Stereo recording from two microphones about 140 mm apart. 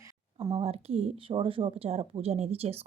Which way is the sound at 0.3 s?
30° right (ahead or behind).